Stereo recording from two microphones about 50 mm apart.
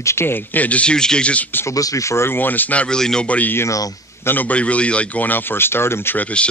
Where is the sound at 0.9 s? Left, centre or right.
Centre.